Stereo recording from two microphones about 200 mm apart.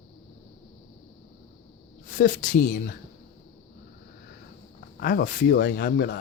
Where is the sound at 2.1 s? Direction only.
40° left (ahead or behind).